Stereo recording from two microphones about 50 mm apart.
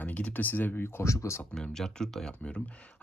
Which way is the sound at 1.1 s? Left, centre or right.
Left.